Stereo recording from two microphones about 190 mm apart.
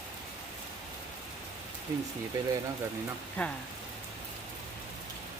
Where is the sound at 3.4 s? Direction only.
5° left (ahead or behind).